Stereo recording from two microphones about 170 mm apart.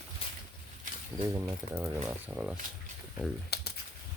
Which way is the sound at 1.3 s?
10° right (ahead or behind).